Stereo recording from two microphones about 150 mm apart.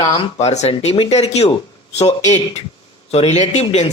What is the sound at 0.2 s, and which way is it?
Speech, 45° left (ahead or behind).